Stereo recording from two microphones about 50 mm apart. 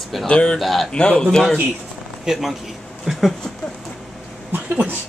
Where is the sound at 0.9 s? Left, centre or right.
Left.